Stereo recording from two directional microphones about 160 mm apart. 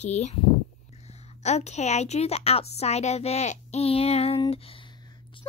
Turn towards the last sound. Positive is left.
turn(degrees=35)  # may be behind; listen again after turning